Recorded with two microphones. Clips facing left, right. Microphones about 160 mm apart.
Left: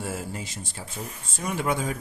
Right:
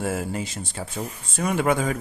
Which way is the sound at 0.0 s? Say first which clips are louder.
Right 6 dB; 65° right (ahead or behind).